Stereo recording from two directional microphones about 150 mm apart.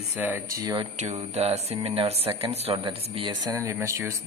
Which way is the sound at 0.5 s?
30° right (ahead or behind).